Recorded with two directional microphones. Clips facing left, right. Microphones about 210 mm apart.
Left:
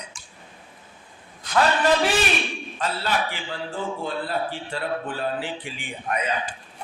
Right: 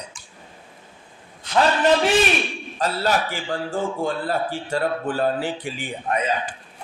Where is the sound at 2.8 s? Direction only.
45° right (ahead or behind).